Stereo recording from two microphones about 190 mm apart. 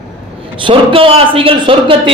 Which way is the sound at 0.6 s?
30° right (ahead or behind).